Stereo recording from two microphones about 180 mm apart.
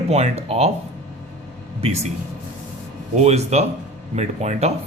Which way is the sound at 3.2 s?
35° right (ahead or behind).